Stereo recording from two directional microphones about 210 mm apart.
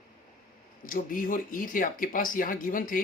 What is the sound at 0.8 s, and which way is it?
Speech, 40° left (ahead or behind).